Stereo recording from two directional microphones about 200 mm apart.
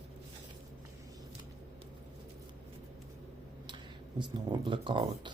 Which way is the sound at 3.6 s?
25° right (ahead or behind).